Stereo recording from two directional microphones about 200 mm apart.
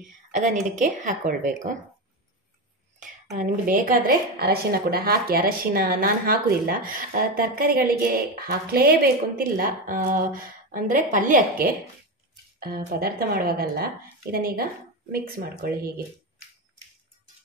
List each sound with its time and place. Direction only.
0.0 s a woman's voice: 40° right (ahead or behind)
3.3 s a woman's voice: 45° right (ahead or behind)